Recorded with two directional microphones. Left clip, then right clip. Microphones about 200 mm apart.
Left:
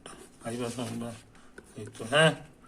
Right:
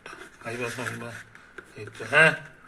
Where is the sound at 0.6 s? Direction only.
25° left (ahead or behind).